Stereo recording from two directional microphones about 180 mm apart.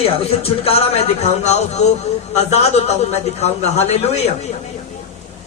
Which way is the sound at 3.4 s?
35° left (ahead or behind).